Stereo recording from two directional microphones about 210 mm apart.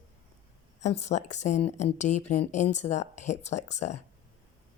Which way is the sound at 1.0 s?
35° left (ahead or behind).